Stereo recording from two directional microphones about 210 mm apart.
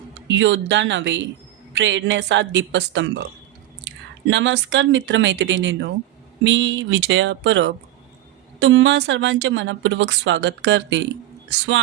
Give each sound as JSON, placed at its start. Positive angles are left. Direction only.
{"t": 0.3, "sound": "speech", "side_deg": -60}